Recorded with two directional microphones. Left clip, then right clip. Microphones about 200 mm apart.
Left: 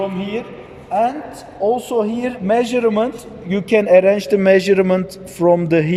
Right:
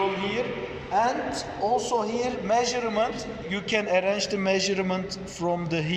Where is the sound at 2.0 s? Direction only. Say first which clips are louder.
Left 7 dB; 50° left (ahead or behind).